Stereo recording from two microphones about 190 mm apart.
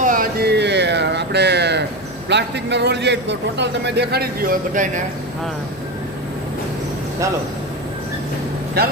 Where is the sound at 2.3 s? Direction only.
65° right (ahead or behind); by 4.9 s 45° right (ahead or behind).